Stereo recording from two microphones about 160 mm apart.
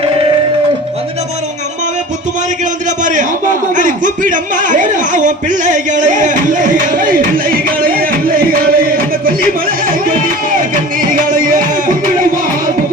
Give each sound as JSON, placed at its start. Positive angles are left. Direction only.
{"t": 0.0, "sound": "music", "side_deg": -30}
{"t": 3.0, "sound": "a man's voice", "side_deg": -50}
{"t": 10.1, "sound": "music", "side_deg": -60}